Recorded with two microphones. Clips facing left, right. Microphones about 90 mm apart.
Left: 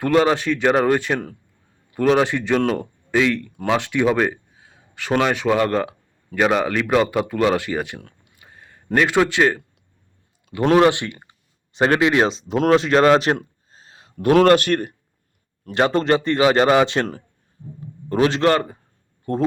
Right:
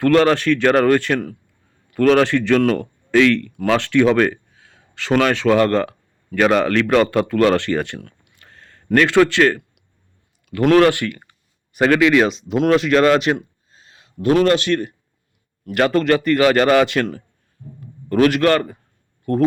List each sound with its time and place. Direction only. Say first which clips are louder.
0.0 s a man's voice: right 3 dB; 15° left (ahead or behind)
8.4 s a sound: left 2 dB; 15° left (ahead or behind)
10.5 s speech: right 2 dB; 25° left (ahead or behind)
14.2 s a man's voice: left 2 dB; 50° left (ahead or behind)
15.6 s speech: right 2 dB; 30° left (ahead or behind)